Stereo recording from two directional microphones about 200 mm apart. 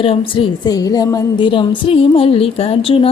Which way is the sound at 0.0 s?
25° left (ahead or behind).